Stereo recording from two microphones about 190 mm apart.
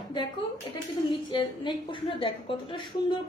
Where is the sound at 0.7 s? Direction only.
25° left (ahead or behind).